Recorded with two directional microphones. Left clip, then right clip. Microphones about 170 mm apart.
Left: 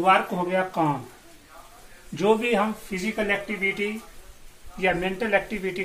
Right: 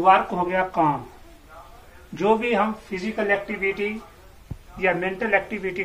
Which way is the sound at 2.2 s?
55° left (ahead or behind).